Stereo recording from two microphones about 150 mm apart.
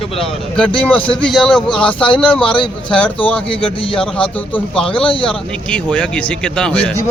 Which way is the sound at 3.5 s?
35° left (ahead or behind).